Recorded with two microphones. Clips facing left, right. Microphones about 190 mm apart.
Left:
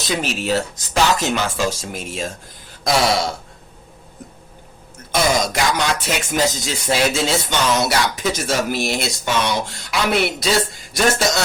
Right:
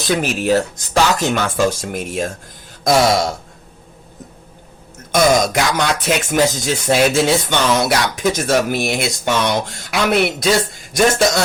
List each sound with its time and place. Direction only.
0.1 s music: 50° right (ahead or behind)
5.1 s music: 55° right (ahead or behind)
10.1 s a man's voice: centre (ahead or behind)
10.4 s a man's voice: 50° right (ahead or behind)